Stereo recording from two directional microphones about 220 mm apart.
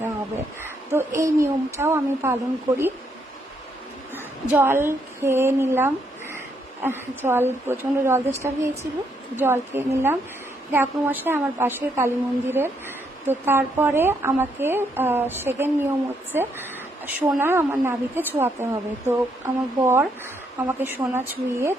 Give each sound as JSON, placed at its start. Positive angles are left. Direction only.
{"t": 0.6, "sound": "a woman's voice", "side_deg": -10}
{"t": 4.1, "sound": "a woman's voice", "side_deg": -10}